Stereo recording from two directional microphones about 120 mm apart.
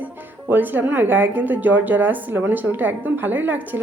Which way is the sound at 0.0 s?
15° right (ahead or behind).